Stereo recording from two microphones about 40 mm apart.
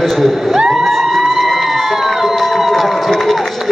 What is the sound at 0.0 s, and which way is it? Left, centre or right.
Speech, centre.